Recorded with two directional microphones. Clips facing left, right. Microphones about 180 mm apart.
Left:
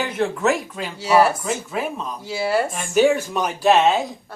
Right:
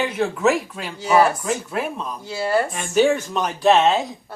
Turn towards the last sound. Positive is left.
turn(degrees=0)  # may be behind; listen again after turning